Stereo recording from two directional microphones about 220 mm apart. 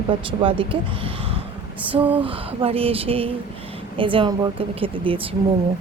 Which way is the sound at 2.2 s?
25° right (ahead or behind).